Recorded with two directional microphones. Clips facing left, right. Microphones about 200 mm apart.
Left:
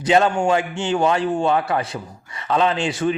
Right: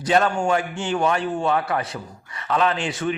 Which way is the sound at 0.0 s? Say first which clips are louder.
Left 3 dB; 25° left (ahead or behind).